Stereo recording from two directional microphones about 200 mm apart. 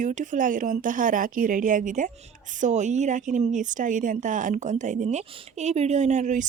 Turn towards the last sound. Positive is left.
turn(degrees=-35)  # may be behind; listen again after turning